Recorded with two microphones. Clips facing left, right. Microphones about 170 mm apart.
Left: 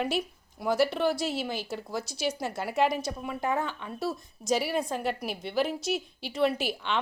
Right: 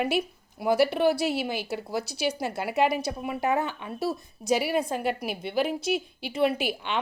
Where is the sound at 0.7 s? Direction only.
60° right (ahead or behind).